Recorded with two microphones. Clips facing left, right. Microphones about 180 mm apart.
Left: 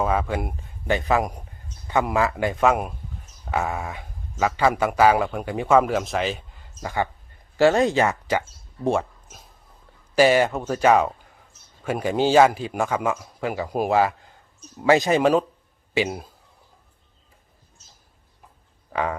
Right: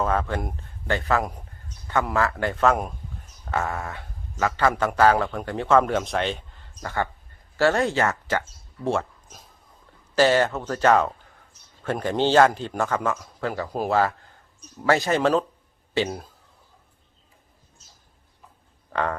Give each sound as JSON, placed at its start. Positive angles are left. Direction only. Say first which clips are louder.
{"t": 0.0, "sound": "a man's voice", "louder": "left 1 dB", "side_deg": 10}
{"t": 10.2, "sound": "a man's voice", "louder": "left 2 dB", "side_deg": 10}
{"t": 18.9, "sound": "a sound", "louder": "left 1 dB", "side_deg": 5}